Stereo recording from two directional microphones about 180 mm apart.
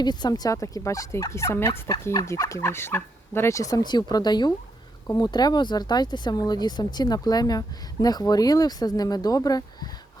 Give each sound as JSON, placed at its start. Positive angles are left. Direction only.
{"t": 0.0, "sound": "speech", "side_deg": 25}